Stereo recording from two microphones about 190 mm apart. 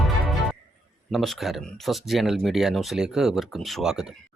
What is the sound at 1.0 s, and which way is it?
Speech, centre (ahead or behind).